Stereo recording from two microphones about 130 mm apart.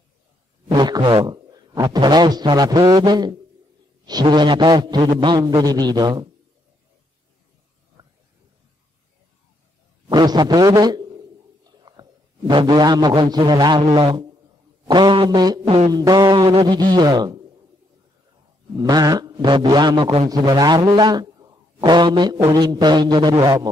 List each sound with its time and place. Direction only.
0.7 s a man's voice: 35° right (ahead or behind)
10.0 s a man's voice: 35° right (ahead or behind)
15.6 s a sound: 55° right (ahead or behind)
15.9 s a man's voice: 30° right (ahead or behind)
18.8 s a man's voice: 30° right (ahead or behind)
20.2 s a man's voice: 30° right (ahead or behind)